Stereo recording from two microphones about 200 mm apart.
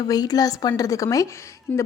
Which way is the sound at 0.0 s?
20° left (ahead or behind).